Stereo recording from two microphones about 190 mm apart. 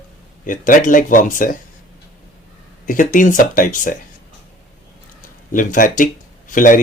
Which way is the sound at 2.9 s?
45° left (ahead or behind).